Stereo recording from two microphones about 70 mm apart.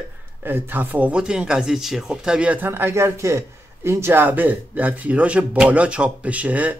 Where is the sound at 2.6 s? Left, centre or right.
Right.